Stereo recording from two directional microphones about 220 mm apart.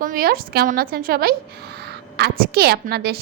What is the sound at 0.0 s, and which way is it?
A woman's voice, 40° right (ahead or behind).